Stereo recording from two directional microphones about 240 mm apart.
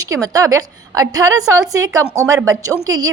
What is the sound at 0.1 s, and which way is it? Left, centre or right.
A woman's voice, centre.